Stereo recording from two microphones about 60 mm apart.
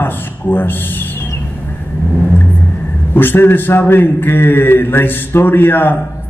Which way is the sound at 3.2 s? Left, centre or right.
Left.